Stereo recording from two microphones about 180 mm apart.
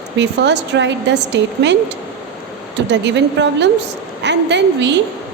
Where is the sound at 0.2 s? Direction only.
75° right (ahead or behind).